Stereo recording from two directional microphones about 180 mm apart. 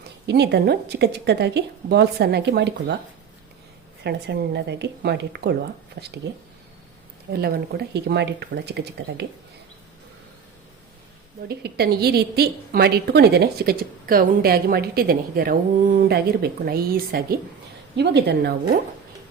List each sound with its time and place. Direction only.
0.3 s a woman's voice: 70° right (ahead or behind)
4.0 s a woman's voice: 70° right (ahead or behind)
7.3 s a woman's voice: 60° right (ahead or behind)
11.4 s a woman's voice: 60° right (ahead or behind)
17.9 s a woman's voice: 70° right (ahead or behind)